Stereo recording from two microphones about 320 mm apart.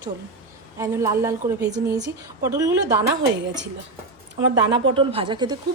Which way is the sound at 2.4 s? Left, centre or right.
Centre.